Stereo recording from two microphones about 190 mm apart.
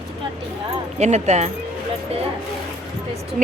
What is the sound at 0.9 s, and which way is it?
Speech, 35° right (ahead or behind).